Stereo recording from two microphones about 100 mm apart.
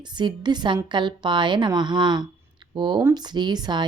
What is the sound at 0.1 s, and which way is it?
A woman's voice, 50° right (ahead or behind).